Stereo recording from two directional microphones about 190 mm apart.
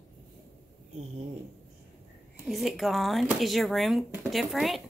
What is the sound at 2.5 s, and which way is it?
Speech, centre (ahead or behind).